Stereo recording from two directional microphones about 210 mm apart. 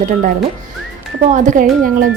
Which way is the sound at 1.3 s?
35° right (ahead or behind).